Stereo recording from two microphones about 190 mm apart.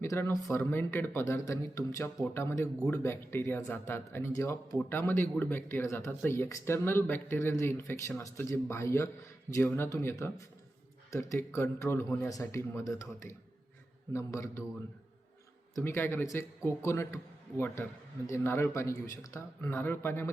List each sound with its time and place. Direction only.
0.0 s a man's voice: 15° left (ahead or behind)
15.7 s a man's voice: 10° left (ahead or behind)
18.3 s a man's voice: 10° left (ahead or behind)